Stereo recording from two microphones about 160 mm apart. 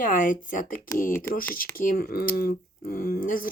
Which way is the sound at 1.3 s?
15° left (ahead or behind).